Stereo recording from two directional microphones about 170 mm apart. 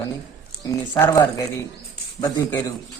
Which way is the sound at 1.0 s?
15° left (ahead or behind).